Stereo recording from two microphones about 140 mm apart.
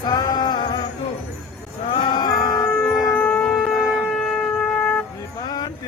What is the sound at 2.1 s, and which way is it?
Music, 30° left (ahead or behind).